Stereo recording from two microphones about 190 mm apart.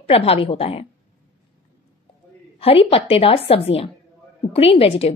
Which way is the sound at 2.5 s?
30° left (ahead or behind).